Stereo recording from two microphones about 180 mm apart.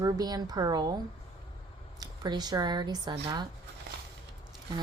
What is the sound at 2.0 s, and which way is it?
Speech, 25° right (ahead or behind).